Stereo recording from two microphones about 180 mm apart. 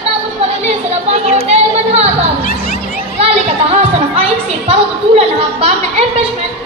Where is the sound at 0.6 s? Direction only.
35° right (ahead or behind).